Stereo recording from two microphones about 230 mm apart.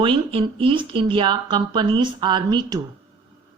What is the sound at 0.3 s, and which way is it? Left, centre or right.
A woman's voice, right.